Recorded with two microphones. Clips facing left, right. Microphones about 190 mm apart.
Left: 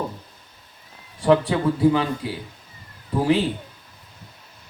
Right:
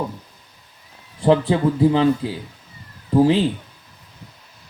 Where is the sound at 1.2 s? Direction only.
25° right (ahead or behind).